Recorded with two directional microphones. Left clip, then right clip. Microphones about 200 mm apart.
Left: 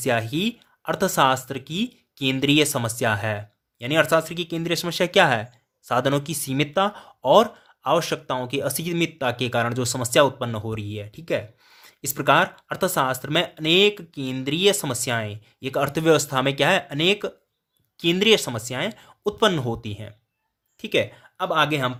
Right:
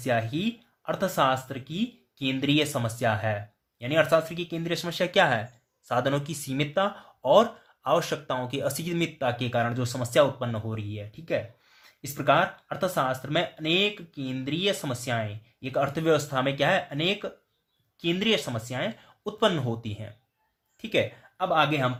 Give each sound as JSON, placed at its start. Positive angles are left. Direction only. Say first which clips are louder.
{"t": 0.0, "sound": "speech", "louder": "left 4 dB", "side_deg": 50}